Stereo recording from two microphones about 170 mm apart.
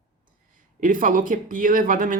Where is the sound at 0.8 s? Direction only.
50° right (ahead or behind).